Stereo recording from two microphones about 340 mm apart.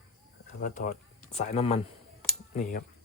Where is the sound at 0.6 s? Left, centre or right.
Left.